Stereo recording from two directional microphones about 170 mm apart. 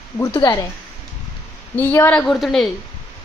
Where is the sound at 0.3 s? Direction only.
20° left (ahead or behind).